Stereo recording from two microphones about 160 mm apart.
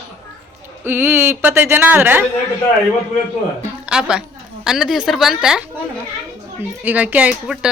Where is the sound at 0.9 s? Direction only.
15° right (ahead or behind).